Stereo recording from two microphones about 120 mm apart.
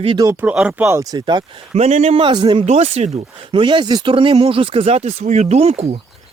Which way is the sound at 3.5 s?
40° right (ahead or behind).